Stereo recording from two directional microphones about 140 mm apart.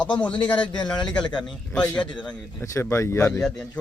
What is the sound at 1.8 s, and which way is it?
Speech, 30° left (ahead or behind).